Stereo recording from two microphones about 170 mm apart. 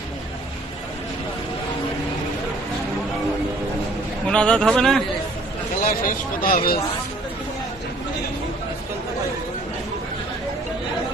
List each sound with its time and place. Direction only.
4.3 s a man's voice: 5° left (ahead or behind)
5.8 s speech: 55° left (ahead or behind)